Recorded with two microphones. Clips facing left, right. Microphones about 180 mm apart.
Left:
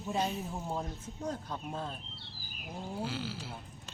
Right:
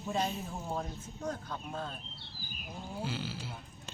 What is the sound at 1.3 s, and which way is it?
Speech, 30° left (ahead or behind).